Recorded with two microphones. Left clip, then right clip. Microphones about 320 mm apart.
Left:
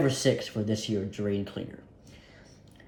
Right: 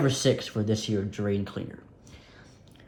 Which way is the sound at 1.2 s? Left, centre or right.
Right.